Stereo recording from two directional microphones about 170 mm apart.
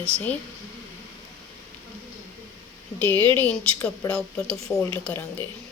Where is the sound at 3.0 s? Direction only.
10° left (ahead or behind).